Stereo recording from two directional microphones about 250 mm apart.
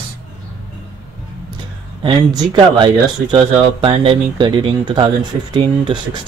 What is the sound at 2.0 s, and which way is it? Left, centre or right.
Speech, centre.